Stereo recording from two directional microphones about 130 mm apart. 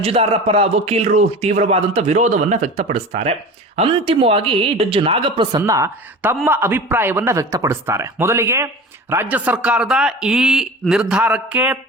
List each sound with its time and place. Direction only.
0.0 s a man's voice: 50° right (ahead or behind)
5.6 s a man's voice: 20° right (ahead or behind)